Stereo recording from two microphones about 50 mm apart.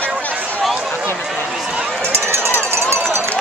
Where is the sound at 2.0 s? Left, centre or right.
Right.